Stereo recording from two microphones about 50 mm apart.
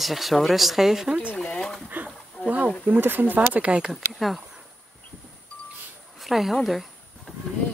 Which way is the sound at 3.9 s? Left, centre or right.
Centre.